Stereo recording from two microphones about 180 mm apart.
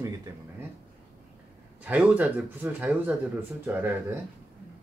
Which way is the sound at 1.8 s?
5° right (ahead or behind).